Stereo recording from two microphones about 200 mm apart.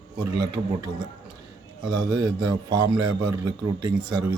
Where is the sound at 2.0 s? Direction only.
20° right (ahead or behind).